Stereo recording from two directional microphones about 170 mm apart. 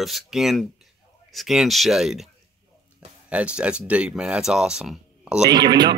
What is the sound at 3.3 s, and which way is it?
Speech, 5° right (ahead or behind).